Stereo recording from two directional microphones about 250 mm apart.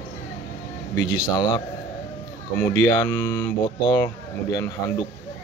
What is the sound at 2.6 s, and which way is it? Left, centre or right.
Speech, centre.